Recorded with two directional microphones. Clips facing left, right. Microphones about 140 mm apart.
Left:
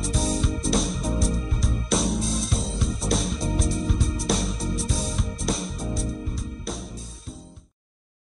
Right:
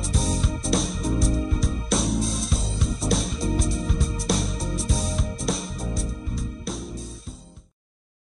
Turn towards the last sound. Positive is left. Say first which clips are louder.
# even
turn(degrees=0)  # may be behind; listen again after turning